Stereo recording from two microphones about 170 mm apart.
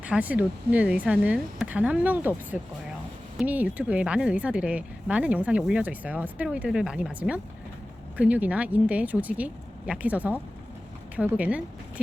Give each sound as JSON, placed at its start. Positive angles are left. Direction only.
{"t": 0.0, "sound": "speech", "side_deg": -10}